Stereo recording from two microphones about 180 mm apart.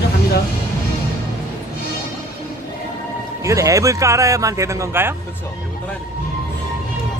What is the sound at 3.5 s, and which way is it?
Speech, 15° right (ahead or behind).